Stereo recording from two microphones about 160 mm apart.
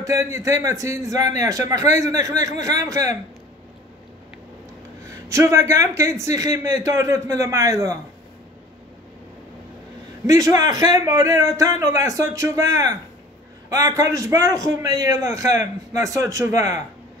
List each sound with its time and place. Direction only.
0.0 s a man's voice: 20° right (ahead or behind)
5.3 s a man's voice: 15° right (ahead or behind)
10.2 s a man's voice: 20° right (ahead or behind)